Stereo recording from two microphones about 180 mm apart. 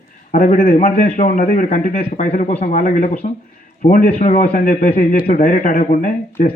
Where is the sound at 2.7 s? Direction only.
55° left (ahead or behind).